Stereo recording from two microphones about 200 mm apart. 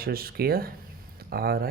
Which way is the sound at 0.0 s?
50° right (ahead or behind).